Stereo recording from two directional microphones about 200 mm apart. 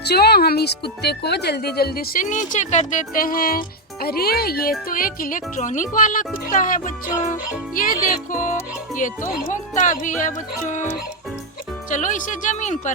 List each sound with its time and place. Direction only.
0.0 s speech: 55° left (ahead or behind); by 10.8 s 40° left (ahead or behind)
11.9 s speech: 40° left (ahead or behind)